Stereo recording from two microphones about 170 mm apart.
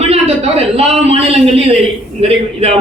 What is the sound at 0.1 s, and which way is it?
A man's voice, 35° right (ahead or behind).